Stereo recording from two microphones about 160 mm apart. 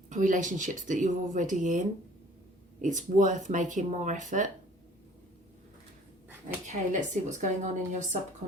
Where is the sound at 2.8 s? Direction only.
50° right (ahead or behind).